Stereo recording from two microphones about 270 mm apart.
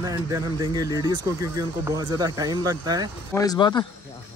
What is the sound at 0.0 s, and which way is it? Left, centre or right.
Speech, centre.